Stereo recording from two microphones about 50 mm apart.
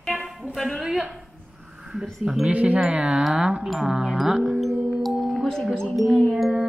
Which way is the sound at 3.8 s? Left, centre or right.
Centre.